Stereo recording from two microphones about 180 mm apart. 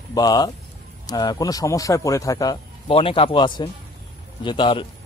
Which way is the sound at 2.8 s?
30° left (ahead or behind).